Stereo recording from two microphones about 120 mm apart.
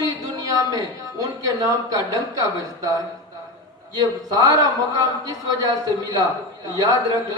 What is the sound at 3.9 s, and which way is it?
A man's voice, 30° right (ahead or behind).